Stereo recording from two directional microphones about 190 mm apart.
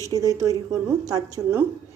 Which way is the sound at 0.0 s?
20° right (ahead or behind).